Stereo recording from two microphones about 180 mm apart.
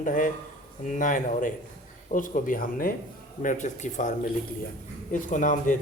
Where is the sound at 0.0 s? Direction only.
50° left (ahead or behind).